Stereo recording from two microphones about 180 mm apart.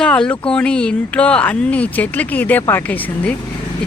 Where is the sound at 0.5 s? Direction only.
5° left (ahead or behind).